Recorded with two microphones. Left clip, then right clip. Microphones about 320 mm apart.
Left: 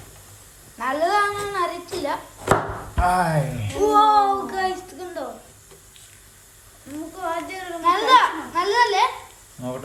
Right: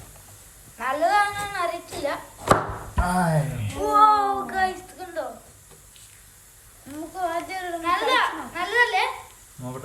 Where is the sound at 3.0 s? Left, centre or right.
Centre.